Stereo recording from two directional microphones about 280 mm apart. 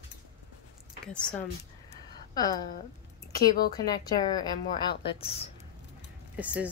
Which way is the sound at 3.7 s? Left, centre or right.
Centre.